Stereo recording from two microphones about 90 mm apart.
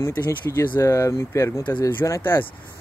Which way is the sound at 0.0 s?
30° left (ahead or behind).